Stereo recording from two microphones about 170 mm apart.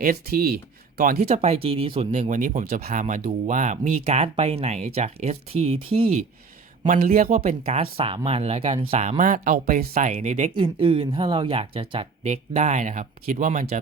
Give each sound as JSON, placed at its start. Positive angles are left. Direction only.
{"t": 0.0, "sound": "speech", "side_deg": -60}
{"t": 1.3, "sound": "speech", "side_deg": -35}
{"t": 6.8, "sound": "a man's voice", "side_deg": -55}
{"t": 7.3, "sound": "speech", "side_deg": -40}
{"t": 10.1, "sound": "speech", "side_deg": -40}
{"t": 10.5, "sound": "speech", "side_deg": -30}